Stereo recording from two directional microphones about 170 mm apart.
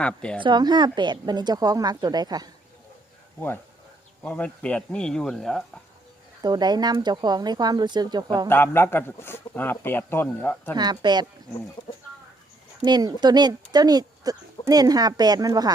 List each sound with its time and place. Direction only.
0.0 s speech: 5° left (ahead or behind)
0.3 s speech: 25° right (ahead or behind)
4.2 s speech: 10° left (ahead or behind)
6.4 s speech: 25° right (ahead or behind)
8.4 s a man's voice: 15° left (ahead or behind)
10.8 s speech: 25° right (ahead or behind)
12.8 s speech: 25° right (ahead or behind)